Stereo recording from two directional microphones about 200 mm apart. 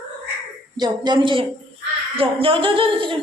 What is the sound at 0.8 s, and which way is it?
Speech, 20° right (ahead or behind).